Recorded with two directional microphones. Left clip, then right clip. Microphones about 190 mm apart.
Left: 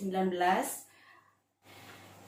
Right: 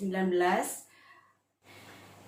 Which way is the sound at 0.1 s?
15° right (ahead or behind).